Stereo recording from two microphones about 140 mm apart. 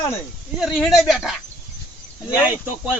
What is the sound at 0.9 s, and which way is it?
A man's voice, centre (ahead or behind).